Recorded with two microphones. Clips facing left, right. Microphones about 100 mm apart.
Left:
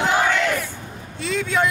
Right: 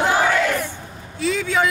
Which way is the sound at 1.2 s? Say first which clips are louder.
Right 2 dB; centre (ahead or behind).